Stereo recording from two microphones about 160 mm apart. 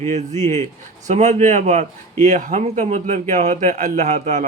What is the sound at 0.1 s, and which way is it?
A man's voice, 45° right (ahead or behind).